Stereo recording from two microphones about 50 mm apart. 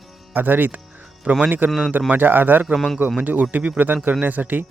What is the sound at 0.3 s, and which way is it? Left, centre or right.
Speech, right.